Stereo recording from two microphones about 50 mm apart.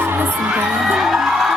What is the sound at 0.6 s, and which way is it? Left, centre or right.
Music, centre.